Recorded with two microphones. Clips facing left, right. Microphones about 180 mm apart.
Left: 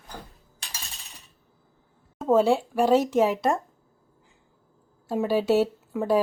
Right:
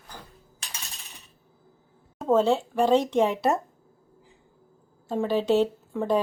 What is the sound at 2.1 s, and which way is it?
Speech, 10° left (ahead or behind).